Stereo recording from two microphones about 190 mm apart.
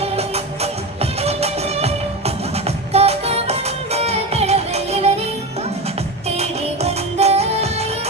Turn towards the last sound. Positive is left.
turn(degrees=-35)  # may be behind; listen again after turning